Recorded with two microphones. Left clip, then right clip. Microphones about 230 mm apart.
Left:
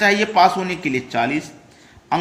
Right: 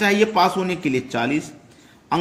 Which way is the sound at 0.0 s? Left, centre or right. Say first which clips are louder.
Left 3 dB; right.